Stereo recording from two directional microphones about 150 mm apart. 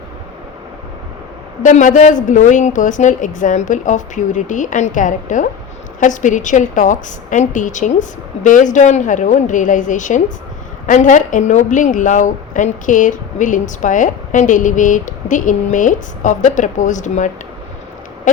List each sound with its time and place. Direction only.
1.6 s a woman's voice: 55° left (ahead or behind)